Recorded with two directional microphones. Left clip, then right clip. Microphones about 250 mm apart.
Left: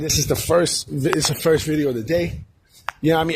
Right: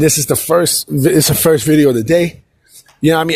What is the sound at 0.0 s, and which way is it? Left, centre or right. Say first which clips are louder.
Speech: right 8 dB; right.